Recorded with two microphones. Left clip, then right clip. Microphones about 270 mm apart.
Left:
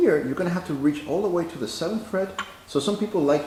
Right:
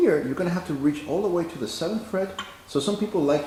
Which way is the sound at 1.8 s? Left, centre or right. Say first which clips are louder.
Left 1 dB; centre.